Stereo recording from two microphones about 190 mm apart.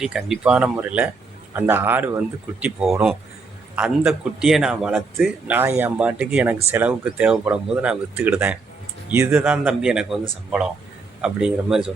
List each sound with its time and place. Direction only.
0.0 s speech: 5° right (ahead or behind)